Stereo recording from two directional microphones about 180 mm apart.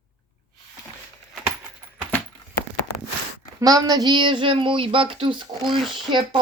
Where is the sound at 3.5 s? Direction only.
20° right (ahead or behind).